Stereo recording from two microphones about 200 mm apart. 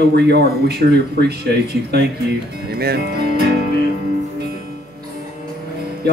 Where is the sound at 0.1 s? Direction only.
55° right (ahead or behind).